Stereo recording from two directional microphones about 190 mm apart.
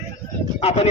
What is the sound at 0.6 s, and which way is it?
Speech, 30° left (ahead or behind).